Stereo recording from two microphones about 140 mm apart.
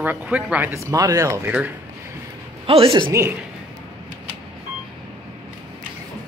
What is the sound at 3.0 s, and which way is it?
Speech, 20° right (ahead or behind).